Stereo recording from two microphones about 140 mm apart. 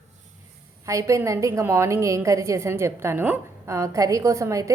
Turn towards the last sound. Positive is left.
turn(degrees=-20)  # may be behind; listen again after turning